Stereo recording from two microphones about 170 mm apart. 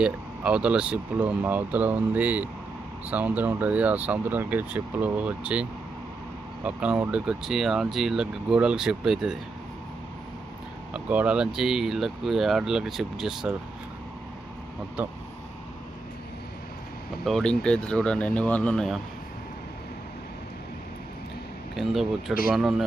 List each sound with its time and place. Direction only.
0.0 s speech: 5° right (ahead or behind)
6.7 s speech: 5° right (ahead or behind)
10.9 s speech: 10° right (ahead or behind)
15.0 s speech: 10° right (ahead or behind)
17.2 s speech: 5° left (ahead or behind)
21.8 s speech: centre (ahead or behind)